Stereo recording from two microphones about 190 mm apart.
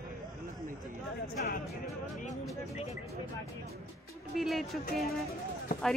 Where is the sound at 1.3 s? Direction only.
45° left (ahead or behind).